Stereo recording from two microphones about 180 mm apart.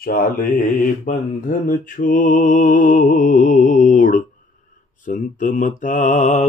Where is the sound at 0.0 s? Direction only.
55° left (ahead or behind).